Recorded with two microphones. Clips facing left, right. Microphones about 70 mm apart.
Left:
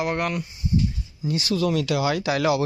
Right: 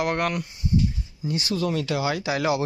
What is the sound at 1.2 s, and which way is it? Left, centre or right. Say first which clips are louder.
Speech: left 2 dB; right.